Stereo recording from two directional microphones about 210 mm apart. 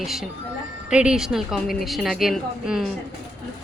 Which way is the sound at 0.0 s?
Centre (ahead or behind).